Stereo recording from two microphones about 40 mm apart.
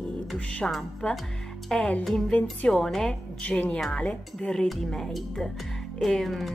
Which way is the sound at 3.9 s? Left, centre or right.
Left.